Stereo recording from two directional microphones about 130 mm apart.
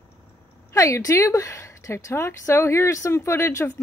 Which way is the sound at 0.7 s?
25° left (ahead or behind).